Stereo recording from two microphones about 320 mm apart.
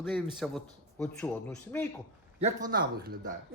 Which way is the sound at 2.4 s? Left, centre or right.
Right.